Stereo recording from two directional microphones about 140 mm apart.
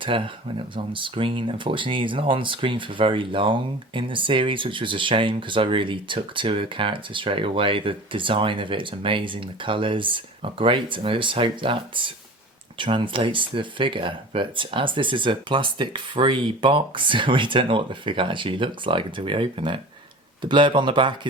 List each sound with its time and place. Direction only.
0.1 s speech: 40° right (ahead or behind)